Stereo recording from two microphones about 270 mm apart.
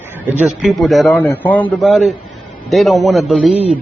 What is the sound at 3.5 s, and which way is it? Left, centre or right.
Speech, right.